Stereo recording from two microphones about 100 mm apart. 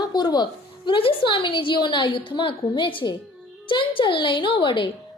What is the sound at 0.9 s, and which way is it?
A child's voice, 60° left (ahead or behind).